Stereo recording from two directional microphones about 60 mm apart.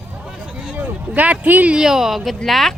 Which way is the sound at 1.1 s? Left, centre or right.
Right.